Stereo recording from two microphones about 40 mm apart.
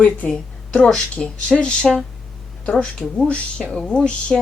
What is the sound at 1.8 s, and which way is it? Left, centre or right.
Speech, centre.